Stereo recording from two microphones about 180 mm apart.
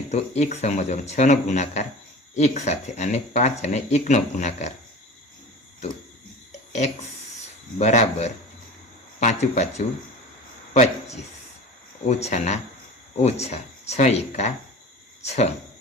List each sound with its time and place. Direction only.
0.1 s speech: 40° left (ahead or behind)
7.8 s speech: 40° left (ahead or behind)
12.0 s speech: 40° left (ahead or behind)